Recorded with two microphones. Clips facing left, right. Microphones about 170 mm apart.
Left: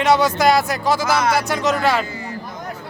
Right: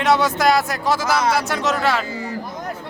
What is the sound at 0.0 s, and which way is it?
Speech, centre (ahead or behind).